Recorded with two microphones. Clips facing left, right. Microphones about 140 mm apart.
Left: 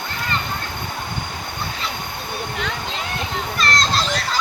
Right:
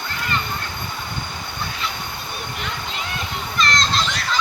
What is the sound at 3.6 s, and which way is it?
Children playing, 40° left (ahead or behind).